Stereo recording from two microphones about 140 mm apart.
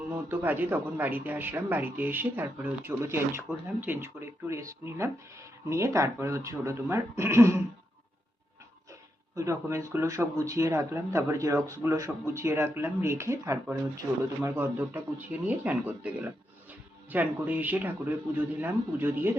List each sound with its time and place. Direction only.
0.3 s speech: 15° right (ahead or behind)
9.3 s speech: 20° right (ahead or behind)